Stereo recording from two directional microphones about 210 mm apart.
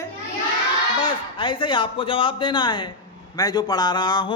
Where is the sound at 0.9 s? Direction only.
25° left (ahead or behind).